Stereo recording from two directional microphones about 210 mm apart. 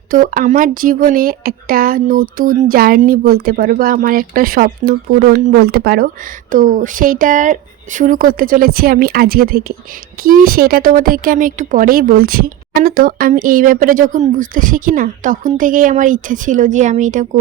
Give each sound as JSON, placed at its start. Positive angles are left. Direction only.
{"t": 0.1, "sound": "speech", "side_deg": -40}